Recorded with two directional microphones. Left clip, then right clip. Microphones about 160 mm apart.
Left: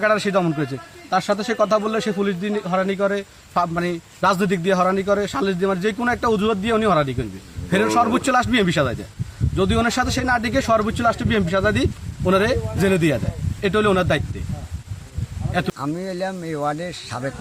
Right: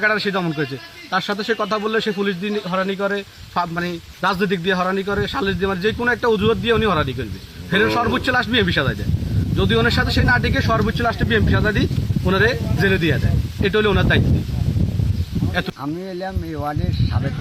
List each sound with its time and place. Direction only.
0.0 s a man's voice: 30° left (ahead or behind)
3.5 s a man's voice: 35° left (ahead or behind)
15.5 s a man's voice: 25° left (ahead or behind)